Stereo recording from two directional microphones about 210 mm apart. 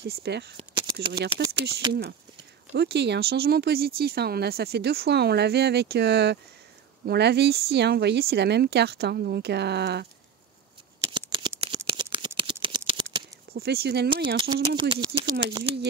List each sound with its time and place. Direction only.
0.0 s speech: 50° right (ahead or behind)
0.6 s a sound: 25° right (ahead or behind)
1.4 s speech: 20° right (ahead or behind)
2.7 s speech: 55° right (ahead or behind)
11.1 s a sound: 20° right (ahead or behind)
13.5 s speech: 50° right (ahead or behind)
14.8 s speech: 25° right (ahead or behind)